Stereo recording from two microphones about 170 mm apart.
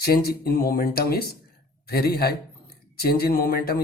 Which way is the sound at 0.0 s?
65° left (ahead or behind).